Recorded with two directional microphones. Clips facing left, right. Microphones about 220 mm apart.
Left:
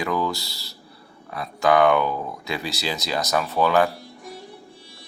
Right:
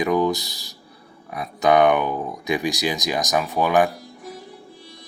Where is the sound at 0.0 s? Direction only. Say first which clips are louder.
Right 5 dB; 20° right (ahead or behind).